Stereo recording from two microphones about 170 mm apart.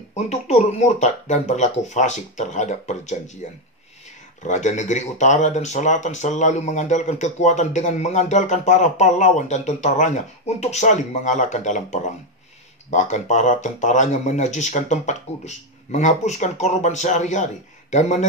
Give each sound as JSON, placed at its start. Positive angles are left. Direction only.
{"t": 0.1, "sound": "speech", "side_deg": 40}
{"t": 4.4, "sound": "speech", "side_deg": 45}